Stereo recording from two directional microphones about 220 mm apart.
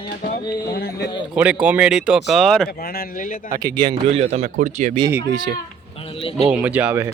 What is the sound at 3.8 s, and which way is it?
A man's voice, 25° right (ahead or behind).